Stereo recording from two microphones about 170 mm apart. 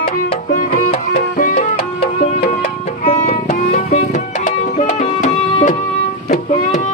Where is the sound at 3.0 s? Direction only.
35° left (ahead or behind).